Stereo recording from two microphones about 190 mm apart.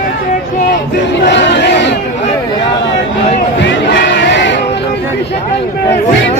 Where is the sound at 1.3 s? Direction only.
65° left (ahead or behind).